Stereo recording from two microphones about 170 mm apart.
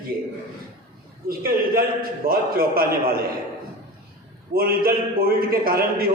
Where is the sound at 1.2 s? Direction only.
60° right (ahead or behind).